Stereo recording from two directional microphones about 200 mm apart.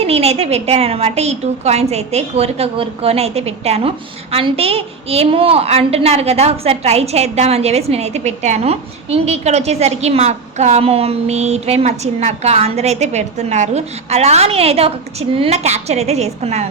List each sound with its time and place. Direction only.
0.0 s a woman's voice: 30° right (ahead or behind)